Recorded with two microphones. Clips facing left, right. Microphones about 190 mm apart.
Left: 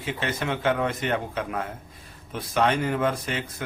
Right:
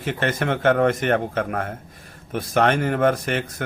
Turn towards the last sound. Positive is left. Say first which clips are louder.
# right 6 dB
turn(degrees=-65)  # may be behind; listen again after turning